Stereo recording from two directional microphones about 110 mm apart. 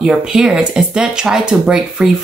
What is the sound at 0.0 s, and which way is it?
Speech, 5° right (ahead or behind).